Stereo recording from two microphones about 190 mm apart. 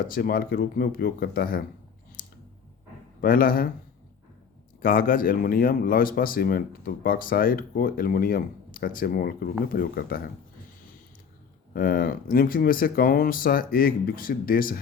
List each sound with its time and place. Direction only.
0.0 s speech: 50° left (ahead or behind)
3.2 s speech: 50° left (ahead or behind)
4.8 s speech: 50° left (ahead or behind)
11.7 s speech: 50° left (ahead or behind)